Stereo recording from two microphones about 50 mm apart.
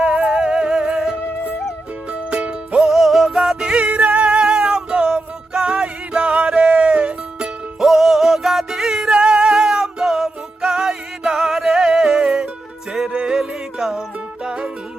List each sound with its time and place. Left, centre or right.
0.0 s music: centre
2.3 s music: right
2.7 s music: centre
3.7 s music: right
7.8 s music: centre